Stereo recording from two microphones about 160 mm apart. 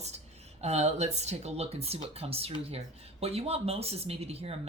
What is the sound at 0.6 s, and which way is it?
A woman's voice, 45° right (ahead or behind).